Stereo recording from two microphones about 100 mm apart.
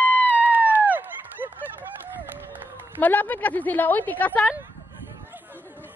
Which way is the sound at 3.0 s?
15° left (ahead or behind).